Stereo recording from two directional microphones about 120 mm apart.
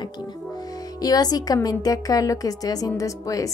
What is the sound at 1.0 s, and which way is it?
A woman's voice, 35° left (ahead or behind).